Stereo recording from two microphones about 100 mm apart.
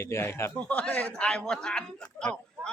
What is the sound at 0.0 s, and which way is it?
Speech, 25° left (ahead or behind).